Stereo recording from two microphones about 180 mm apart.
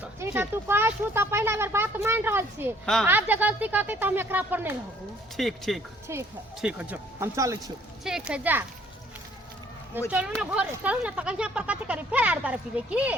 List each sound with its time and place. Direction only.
0.0 s speech: 10° right (ahead or behind)
2.8 s speech: centre (ahead or behind)
3.1 s speech: 10° right (ahead or behind)
5.4 s speech: centre (ahead or behind)
6.1 s speech: 15° right (ahead or behind)
8.0 s speech: 5° right (ahead or behind)
10.1 s speech: 5° right (ahead or behind)